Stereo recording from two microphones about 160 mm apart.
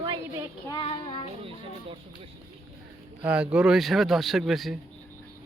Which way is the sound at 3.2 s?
5° right (ahead or behind).